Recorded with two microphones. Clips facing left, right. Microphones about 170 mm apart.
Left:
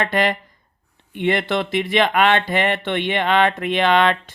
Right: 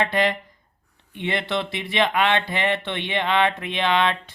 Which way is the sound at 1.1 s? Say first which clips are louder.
Left 5 dB; 55° left (ahead or behind).